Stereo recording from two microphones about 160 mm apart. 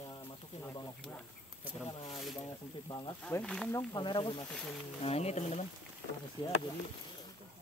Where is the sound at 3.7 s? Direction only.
25° left (ahead or behind).